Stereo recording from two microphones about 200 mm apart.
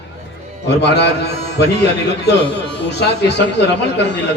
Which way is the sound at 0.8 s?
60° left (ahead or behind).